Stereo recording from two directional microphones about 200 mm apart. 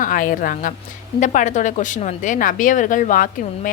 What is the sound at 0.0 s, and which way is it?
A woman's voice, 45° left (ahead or behind).